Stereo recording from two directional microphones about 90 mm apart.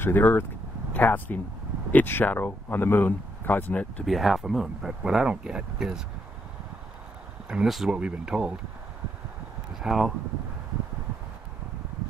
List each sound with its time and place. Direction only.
0.0 s speech: 25° left (ahead or behind)
4.0 s speech: centre (ahead or behind)
7.4 s speech: 5° right (ahead or behind)
9.8 s speech: 5° right (ahead or behind)